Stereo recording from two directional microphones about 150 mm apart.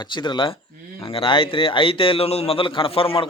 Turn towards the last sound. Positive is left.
turn(degrees=35)  # may be behind; listen again after turning